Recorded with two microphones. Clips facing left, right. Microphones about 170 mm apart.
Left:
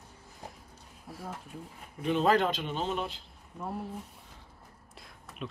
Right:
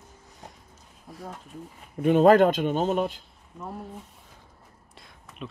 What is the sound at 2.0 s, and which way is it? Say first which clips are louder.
Speech: right 9 dB; 50° right (ahead or behind).